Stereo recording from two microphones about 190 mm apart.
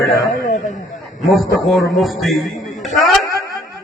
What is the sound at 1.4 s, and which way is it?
A man's voice, centre (ahead or behind).